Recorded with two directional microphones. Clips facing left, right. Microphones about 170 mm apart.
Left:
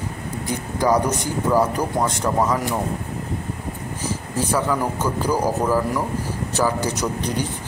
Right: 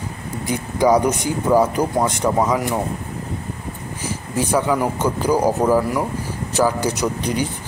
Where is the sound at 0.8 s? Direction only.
15° right (ahead or behind).